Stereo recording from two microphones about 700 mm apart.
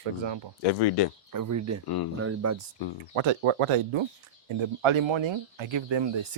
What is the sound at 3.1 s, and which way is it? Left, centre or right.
Speech, right.